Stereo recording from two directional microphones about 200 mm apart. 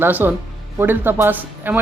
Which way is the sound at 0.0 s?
10° right (ahead or behind).